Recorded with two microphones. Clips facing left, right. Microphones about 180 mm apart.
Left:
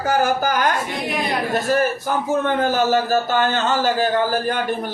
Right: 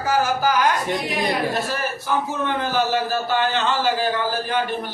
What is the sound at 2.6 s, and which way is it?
A man's voice, 45° left (ahead or behind).